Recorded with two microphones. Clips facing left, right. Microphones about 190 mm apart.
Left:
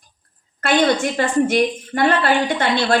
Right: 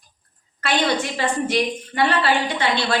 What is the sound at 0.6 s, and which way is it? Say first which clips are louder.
A woman's voice: left 5 dB; 50° left (ahead or behind).